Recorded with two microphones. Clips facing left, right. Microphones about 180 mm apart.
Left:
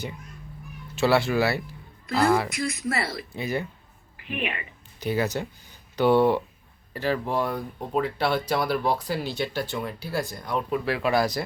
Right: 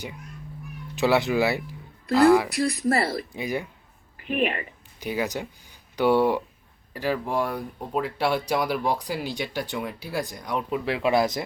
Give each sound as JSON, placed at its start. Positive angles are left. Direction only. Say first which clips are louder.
{"t": 0.9, "sound": "speech", "louder": "even", "side_deg": -15}
{"t": 2.5, "sound": "speech", "louder": "right 5 dB", "side_deg": -35}
{"t": 3.3, "sound": "speech", "louder": "even", "side_deg": -15}
{"t": 4.3, "sound": "speech", "louder": "right 6 dB", "side_deg": -40}
{"t": 4.9, "sound": "speech", "louder": "left 2 dB", "side_deg": -10}